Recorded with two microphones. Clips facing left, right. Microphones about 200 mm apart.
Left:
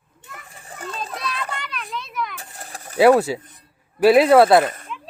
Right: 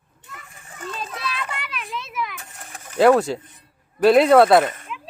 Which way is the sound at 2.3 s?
35° left (ahead or behind).